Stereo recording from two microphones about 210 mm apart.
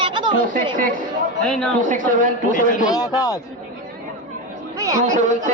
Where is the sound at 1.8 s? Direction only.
40° right (ahead or behind).